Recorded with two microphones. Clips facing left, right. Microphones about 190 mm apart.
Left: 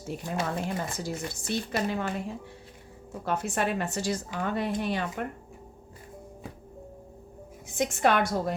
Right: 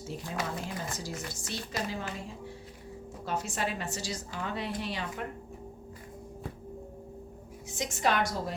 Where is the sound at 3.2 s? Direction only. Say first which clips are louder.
Left 5 dB; 60° left (ahead or behind).